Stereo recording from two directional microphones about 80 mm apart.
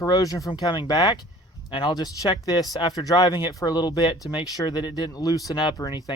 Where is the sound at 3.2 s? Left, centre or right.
Left.